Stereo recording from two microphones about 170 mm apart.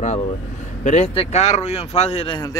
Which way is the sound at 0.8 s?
35° left (ahead or behind).